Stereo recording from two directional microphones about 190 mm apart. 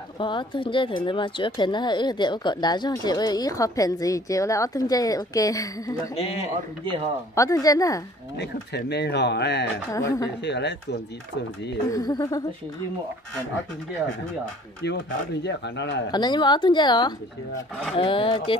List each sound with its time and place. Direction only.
0.2 s speech: 25° left (ahead or behind)
7.3 s speech: 15° left (ahead or behind)
8.4 s speech: 60° left (ahead or behind)
9.9 s speech: 15° left (ahead or behind)
10.4 s speech: 65° left (ahead or behind)
11.9 s speech: 20° left (ahead or behind)
14.8 s speech: 75° left (ahead or behind)
16.1 s speech: 20° left (ahead or behind)